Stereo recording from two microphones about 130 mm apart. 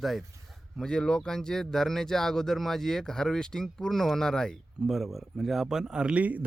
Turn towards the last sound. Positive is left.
turn(degrees=-10)  # may be behind; listen again after turning